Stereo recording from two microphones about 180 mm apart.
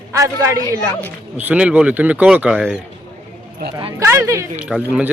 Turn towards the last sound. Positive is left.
turn(degrees=-5)  # may be behind; listen again after turning